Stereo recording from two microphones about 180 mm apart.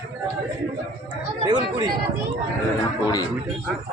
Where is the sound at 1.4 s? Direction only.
25° right (ahead or behind).